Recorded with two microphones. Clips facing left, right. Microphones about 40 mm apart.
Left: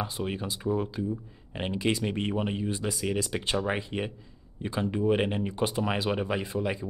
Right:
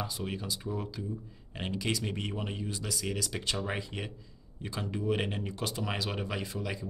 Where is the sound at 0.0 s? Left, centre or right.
Left.